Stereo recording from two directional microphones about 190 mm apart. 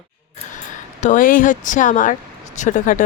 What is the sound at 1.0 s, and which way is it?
Speech, 45° left (ahead or behind).